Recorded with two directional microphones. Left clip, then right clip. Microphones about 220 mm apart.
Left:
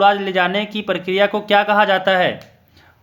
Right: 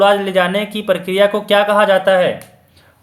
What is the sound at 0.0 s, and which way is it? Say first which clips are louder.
Speech: right 2 dB; 20° left (ahead or behind).